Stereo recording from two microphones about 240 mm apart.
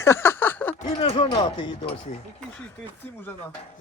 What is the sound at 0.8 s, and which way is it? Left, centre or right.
Speech, left.